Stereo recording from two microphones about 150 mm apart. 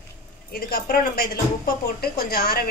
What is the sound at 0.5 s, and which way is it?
Speech, 90° left.